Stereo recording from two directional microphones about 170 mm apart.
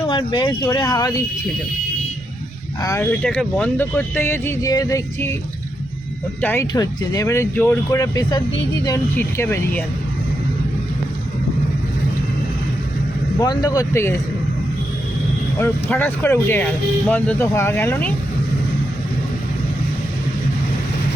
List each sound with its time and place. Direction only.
0.1 s speech: 25° left (ahead or behind)
3.0 s speech: 10° left (ahead or behind)
6.4 s speech: 15° left (ahead or behind)
13.4 s speech: 25° left (ahead or behind)
15.5 s speech: 15° left (ahead or behind)